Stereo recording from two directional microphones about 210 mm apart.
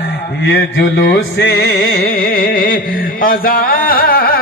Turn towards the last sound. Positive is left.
turn(degrees=45)  # may be behind; listen again after turning